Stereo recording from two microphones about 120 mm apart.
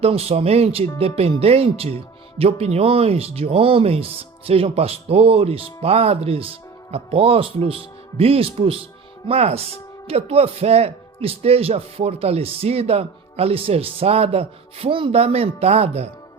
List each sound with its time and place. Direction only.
0.0 s speech: 55° right (ahead or behind)